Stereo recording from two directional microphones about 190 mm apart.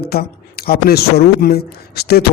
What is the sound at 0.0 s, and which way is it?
A man's voice, 55° left (ahead or behind).